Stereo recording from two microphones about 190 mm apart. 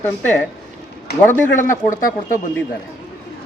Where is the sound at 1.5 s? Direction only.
45° left (ahead or behind).